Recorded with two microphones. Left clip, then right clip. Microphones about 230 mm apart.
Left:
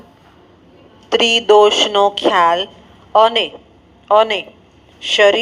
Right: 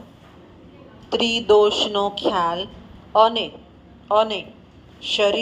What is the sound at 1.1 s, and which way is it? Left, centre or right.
Speech, left.